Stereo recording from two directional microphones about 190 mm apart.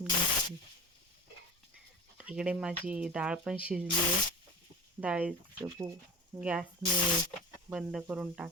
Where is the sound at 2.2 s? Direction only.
5° right (ahead or behind).